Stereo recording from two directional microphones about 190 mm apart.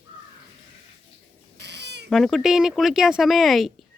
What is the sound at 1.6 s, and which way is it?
Cat, 65° right (ahead or behind).